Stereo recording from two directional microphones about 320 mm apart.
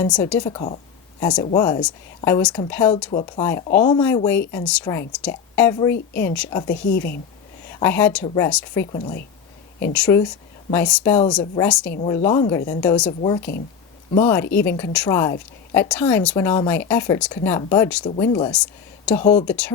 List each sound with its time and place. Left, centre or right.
0.0 s a woman's voice: centre
3.1 s a woman's voice: centre
6.7 s a woman's voice: left
7.7 s a woman's voice: centre
8.9 s a woman's voice: centre
9.8 s a woman's voice: centre